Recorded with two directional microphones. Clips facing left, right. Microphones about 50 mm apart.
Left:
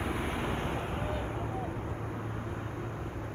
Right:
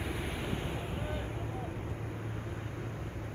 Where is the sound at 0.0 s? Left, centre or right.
Left.